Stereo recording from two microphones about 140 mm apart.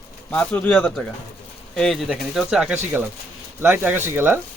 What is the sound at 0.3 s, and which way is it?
Speech, 10° left (ahead or behind).